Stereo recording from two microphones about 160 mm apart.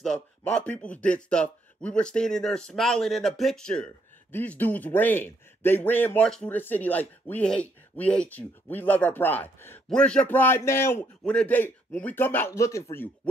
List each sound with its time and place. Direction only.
0.0 s speech: 5° left (ahead or behind)